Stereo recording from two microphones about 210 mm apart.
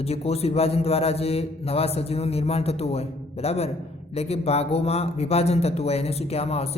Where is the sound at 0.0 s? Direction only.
30° left (ahead or behind).